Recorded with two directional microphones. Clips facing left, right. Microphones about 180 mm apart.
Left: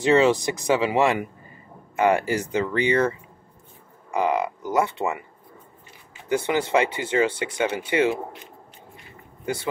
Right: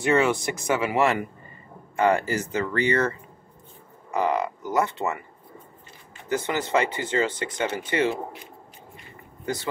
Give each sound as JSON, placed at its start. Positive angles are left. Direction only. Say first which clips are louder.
{"t": 0.0, "sound": "speech", "louder": "left 4 dB", "side_deg": 20}
{"t": 6.2, "sound": "speech", "louder": "left 3 dB", "side_deg": 15}